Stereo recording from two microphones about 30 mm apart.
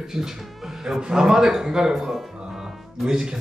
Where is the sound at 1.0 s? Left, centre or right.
Right.